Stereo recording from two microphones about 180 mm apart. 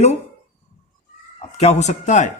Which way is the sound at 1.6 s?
40° left (ahead or behind).